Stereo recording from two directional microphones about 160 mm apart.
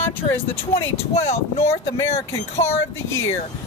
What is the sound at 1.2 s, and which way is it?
Speech, 40° left (ahead or behind).